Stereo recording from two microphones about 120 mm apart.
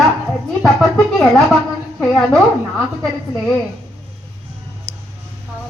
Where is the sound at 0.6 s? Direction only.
Centre (ahead or behind).